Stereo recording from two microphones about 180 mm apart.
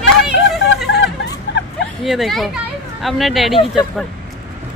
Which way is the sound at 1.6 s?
75° left (ahead or behind).